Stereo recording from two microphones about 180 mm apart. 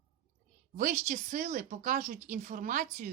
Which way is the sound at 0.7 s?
45° right (ahead or behind).